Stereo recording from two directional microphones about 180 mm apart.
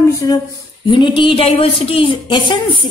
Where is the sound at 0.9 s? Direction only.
25° left (ahead or behind).